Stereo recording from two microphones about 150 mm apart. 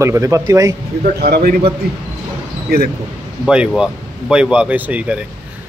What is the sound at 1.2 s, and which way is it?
Speech, 80° right.